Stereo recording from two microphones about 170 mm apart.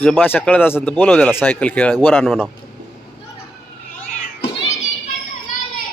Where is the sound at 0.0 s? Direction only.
10° left (ahead or behind).